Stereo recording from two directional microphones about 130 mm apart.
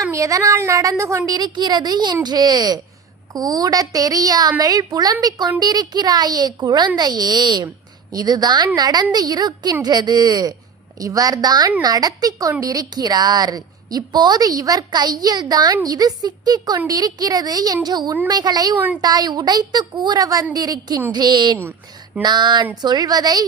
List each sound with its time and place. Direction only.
0.1 s a woman's voice: 25° right (ahead or behind)
21.6 s a woman's voice: 15° right (ahead or behind)
22.2 s speech: 35° right (ahead or behind)